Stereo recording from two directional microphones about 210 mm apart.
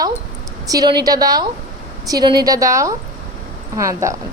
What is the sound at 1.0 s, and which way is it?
A woman's voice, 15° right (ahead or behind).